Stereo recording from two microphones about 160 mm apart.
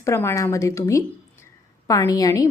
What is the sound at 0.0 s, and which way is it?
A woman's voice, 15° left (ahead or behind).